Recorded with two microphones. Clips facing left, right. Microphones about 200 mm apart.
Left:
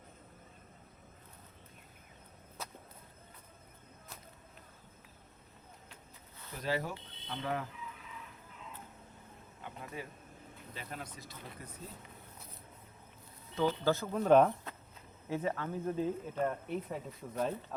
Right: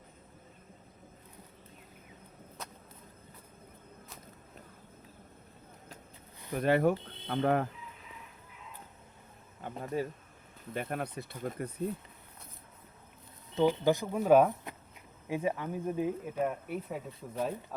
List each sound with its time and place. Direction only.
2.6 s whip: centre (ahead or behind)
6.5 s speech: 60° right (ahead or behind)
9.6 s speech: 40° right (ahead or behind)
10.8 s speech: 60° right (ahead or behind)
13.6 s speech: 15° right (ahead or behind)